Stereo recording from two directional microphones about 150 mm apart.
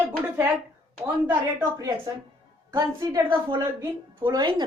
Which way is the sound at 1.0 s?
10° right (ahead or behind).